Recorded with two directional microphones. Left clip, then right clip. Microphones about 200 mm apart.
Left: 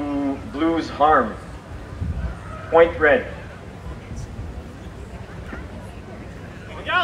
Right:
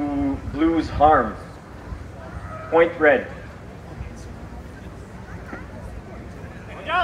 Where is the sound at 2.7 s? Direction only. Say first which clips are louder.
Left 1 dB; 35° right (ahead or behind).